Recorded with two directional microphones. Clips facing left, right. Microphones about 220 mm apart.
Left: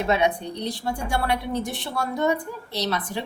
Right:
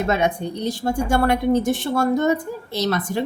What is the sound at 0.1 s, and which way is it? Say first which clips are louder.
A woman's voice: right 1 dB; 45° right (ahead or behind).